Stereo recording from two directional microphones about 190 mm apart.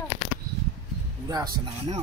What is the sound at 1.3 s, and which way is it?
Speech, 20° right (ahead or behind).